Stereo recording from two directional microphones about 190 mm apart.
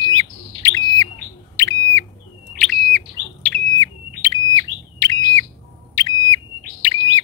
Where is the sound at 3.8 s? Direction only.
20° left (ahead or behind).